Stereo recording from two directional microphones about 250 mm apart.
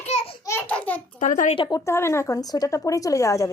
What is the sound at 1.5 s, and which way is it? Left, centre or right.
Speech, centre.